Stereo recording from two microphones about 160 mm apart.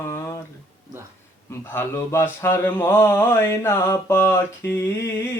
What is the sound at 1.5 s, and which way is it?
Mantra, 15° left (ahead or behind).